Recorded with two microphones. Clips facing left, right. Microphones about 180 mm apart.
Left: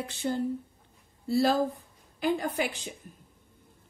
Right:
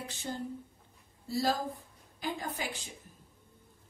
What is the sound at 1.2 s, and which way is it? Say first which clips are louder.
Speech: left 7 dB; 65° left (ahead or behind).